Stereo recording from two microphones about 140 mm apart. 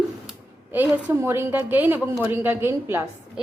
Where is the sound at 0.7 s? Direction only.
15° right (ahead or behind).